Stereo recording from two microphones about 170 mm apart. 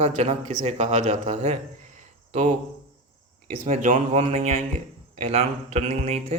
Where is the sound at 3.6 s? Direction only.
50° right (ahead or behind).